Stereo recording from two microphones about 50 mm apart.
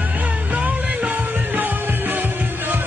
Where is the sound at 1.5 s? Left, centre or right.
Right.